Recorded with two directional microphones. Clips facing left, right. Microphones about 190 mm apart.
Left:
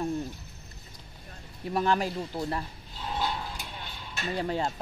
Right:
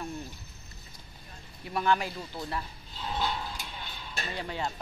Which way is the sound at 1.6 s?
40° left (ahead or behind).